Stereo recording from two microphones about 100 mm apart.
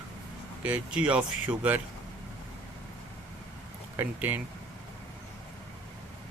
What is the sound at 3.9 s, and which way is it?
Speech, 20° right (ahead or behind).